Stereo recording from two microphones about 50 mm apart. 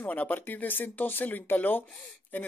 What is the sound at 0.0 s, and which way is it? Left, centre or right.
Speech, left.